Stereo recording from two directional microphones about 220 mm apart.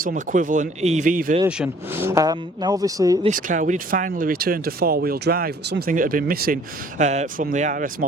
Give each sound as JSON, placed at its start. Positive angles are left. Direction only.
{"t": 0.0, "sound": "speech", "side_deg": -40}
{"t": 1.5, "sound": "speech", "side_deg": -5}
{"t": 3.2, "sound": "speech", "side_deg": -35}
{"t": 7.0, "sound": "speech", "side_deg": -30}